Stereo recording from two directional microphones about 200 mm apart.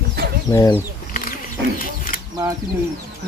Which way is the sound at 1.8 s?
45° left (ahead or behind).